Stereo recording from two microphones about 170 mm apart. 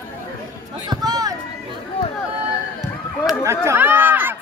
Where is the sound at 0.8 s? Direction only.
20° right (ahead or behind).